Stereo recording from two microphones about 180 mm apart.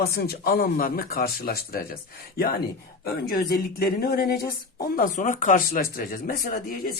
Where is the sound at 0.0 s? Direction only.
60° left (ahead or behind).